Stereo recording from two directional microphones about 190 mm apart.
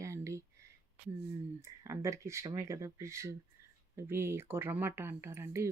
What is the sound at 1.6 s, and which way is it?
Speech, 15° right (ahead or behind).